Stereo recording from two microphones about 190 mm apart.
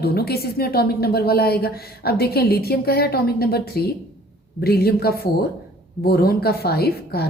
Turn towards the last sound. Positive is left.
turn(degrees=55)  # may be behind; listen again after turning